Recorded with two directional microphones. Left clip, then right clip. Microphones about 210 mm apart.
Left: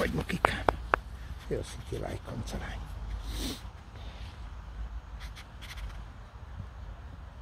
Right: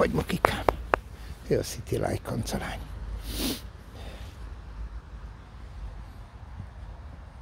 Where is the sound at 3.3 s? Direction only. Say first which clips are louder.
Right 7 dB; 40° right (ahead or behind).